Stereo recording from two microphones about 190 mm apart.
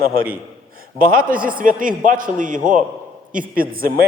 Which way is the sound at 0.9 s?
50° right (ahead or behind).